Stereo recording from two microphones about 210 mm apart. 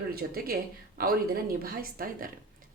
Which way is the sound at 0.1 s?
45° right (ahead or behind).